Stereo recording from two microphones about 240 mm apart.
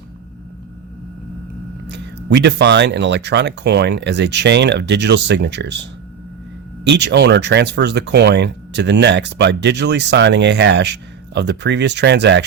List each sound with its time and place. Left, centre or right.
1.9 s speech: right